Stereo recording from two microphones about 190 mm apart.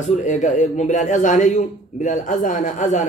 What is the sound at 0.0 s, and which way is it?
A man's voice, 40° left (ahead or behind).